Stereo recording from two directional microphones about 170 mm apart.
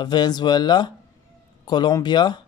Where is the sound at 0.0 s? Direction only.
25° left (ahead or behind).